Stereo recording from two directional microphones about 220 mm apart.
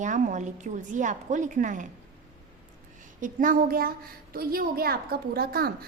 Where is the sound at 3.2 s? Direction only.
35° right (ahead or behind).